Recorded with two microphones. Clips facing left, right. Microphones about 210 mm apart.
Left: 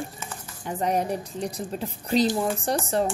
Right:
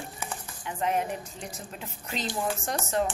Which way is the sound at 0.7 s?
40° left (ahead or behind).